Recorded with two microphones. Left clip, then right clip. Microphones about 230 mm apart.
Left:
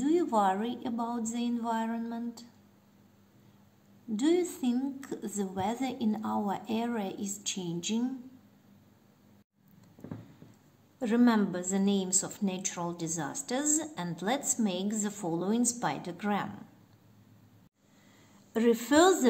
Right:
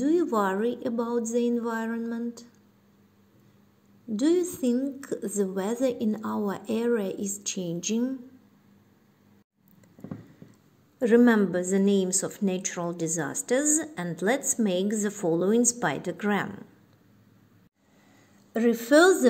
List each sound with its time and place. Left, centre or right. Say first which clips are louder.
0.0 s a woman's voice: right 2 dB; centre
4.2 s a woman's voice: right 4 dB; centre
11.0 s a woman's voice: right 7 dB; centre
18.5 s a woman's voice: right 5 dB; centre